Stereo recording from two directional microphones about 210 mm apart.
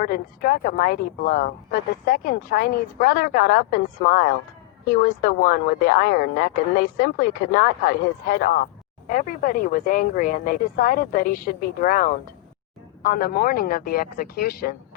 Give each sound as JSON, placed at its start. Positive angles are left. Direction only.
{"t": 0.0, "sound": "speech", "side_deg": 45}